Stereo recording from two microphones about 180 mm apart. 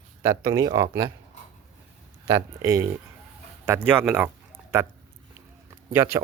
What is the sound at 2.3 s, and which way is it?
Speech, 20° right (ahead or behind).